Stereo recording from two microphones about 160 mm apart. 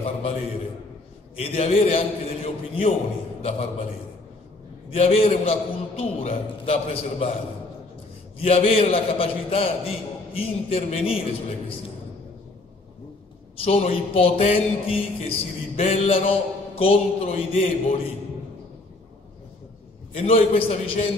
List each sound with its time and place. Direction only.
0.0 s a man's voice: 35° left (ahead or behind)
4.9 s a man's voice: 40° left (ahead or behind)
8.4 s a man's voice: 40° left (ahead or behind)
13.7 s a man's voice: 40° left (ahead or behind)
20.2 s a man's voice: 35° left (ahead or behind)